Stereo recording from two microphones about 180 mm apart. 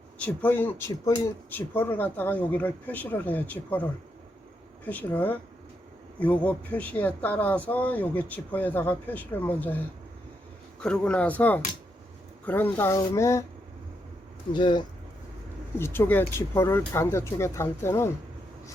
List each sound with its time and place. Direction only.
0.2 s speech: 10° left (ahead or behind)
4.9 s speech: 10° left (ahead or behind)
14.5 s speech: 25° left (ahead or behind)
15.8 s speech: 10° left (ahead or behind)